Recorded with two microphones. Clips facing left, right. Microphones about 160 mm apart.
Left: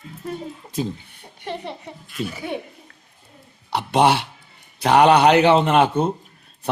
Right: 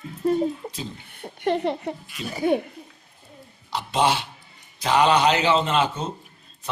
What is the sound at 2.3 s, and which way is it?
Speech, 40° right (ahead or behind).